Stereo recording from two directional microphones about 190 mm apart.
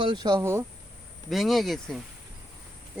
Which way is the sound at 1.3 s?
Centre (ahead or behind).